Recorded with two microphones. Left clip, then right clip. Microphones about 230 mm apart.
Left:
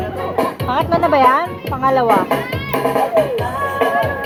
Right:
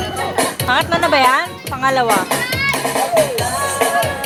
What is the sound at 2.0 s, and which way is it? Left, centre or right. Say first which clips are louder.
Music: left 2 dB; right.